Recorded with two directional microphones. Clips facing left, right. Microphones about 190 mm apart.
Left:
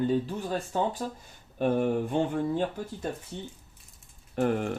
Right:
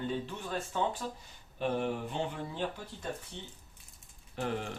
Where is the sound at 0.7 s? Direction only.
40° left (ahead or behind).